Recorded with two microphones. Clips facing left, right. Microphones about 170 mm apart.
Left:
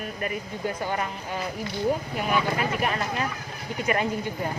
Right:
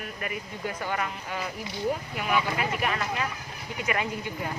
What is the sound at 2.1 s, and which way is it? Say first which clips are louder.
Speech: left 2 dB; 35° left (ahead or behind).